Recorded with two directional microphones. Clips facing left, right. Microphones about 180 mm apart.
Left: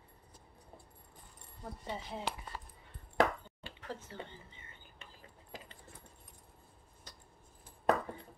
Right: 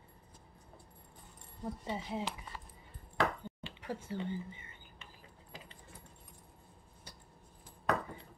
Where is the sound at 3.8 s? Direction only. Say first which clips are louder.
Right 6 dB; 10° right (ahead or behind).